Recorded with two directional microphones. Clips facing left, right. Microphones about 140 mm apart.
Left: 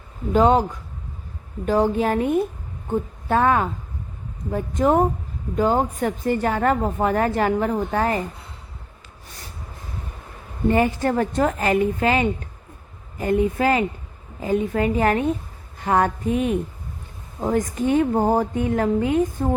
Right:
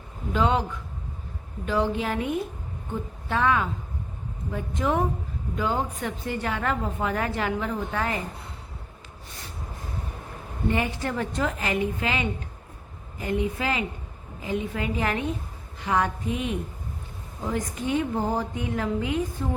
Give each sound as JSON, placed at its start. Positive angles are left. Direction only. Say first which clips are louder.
{"t": 0.3, "sound": "a woman's voice", "louder": "left 7 dB", "side_deg": 45}
{"t": 10.7, "sound": "a woman's voice", "louder": "left 8 dB", "side_deg": 45}